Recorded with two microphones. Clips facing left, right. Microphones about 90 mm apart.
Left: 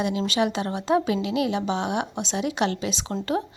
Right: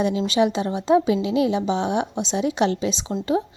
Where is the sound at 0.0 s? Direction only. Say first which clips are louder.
Right 4 dB; 25° right (ahead or behind).